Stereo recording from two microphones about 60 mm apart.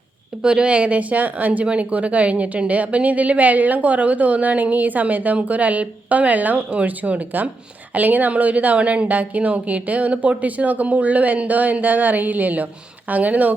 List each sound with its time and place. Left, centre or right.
0.4 s a woman's voice: centre